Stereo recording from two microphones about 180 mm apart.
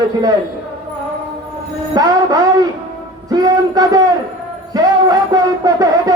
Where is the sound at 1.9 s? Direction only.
20° right (ahead or behind).